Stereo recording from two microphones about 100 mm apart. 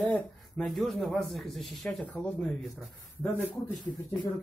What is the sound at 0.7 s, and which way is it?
Speech, centre (ahead or behind).